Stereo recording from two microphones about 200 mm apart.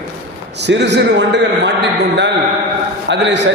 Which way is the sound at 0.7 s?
60° right (ahead or behind).